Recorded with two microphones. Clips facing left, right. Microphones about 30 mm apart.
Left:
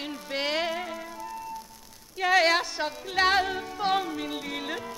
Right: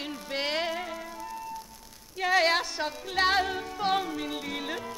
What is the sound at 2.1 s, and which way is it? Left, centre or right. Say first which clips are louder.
Music: left 2 dB; centre.